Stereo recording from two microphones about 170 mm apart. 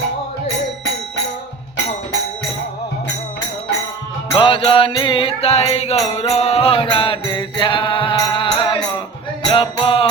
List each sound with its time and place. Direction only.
4.4 s music: 30° left (ahead or behind)